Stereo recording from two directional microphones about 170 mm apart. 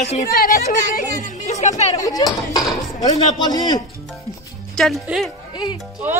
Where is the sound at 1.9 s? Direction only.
20° left (ahead or behind).